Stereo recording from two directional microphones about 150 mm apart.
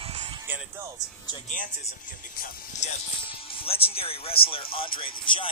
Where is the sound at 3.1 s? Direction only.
35° left (ahead or behind).